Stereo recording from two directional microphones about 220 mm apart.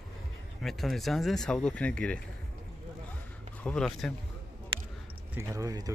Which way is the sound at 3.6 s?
5° left (ahead or behind).